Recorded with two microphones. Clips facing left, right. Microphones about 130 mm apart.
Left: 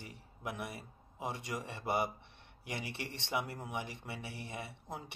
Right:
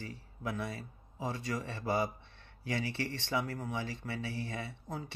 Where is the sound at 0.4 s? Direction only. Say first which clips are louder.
Right 4 dB; 20° left (ahead or behind).